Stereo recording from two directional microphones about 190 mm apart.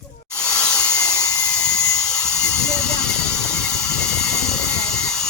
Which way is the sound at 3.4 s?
5° left (ahead or behind).